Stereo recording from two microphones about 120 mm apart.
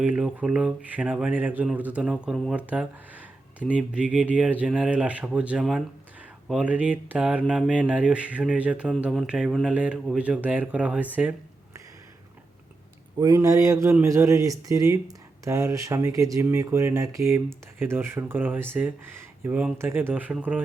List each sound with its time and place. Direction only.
0.0 s speech: 10° right (ahead or behind)
13.1 s speech: 30° right (ahead or behind); by 20.6 s 15° right (ahead or behind)